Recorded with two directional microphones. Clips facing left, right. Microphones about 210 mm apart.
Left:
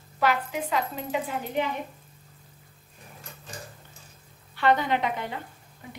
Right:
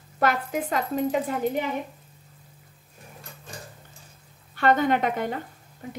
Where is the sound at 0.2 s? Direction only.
45° right (ahead or behind).